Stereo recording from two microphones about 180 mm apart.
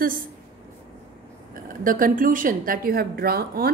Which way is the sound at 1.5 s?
50° right (ahead or behind).